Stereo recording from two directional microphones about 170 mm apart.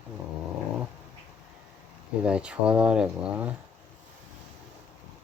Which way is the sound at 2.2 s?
5° right (ahead or behind).